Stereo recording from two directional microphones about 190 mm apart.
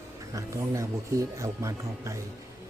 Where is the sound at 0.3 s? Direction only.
15° right (ahead or behind).